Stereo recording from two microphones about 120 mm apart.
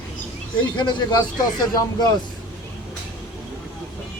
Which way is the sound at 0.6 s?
40° left (ahead or behind).